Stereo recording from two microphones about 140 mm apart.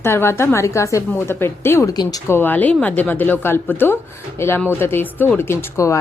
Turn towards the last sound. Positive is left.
turn(degrees=20)  # may be behind; listen again after turning